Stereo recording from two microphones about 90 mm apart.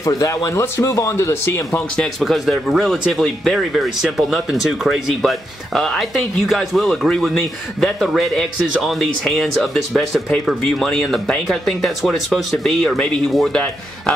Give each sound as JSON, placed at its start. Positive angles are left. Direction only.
{"t": 0.0, "sound": "speech", "side_deg": 35}
{"t": 2.0, "sound": "speech", "side_deg": 0}